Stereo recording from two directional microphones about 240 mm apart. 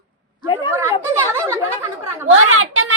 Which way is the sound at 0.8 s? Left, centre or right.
Centre.